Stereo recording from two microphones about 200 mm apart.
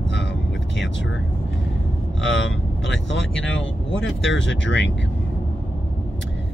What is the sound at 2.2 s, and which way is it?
Speech, 70° left (ahead or behind).